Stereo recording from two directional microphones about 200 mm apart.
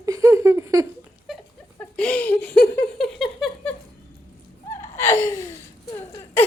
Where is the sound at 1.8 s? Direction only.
5° left (ahead or behind).